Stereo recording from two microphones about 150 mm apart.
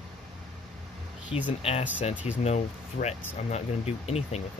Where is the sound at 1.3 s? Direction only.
40° left (ahead or behind).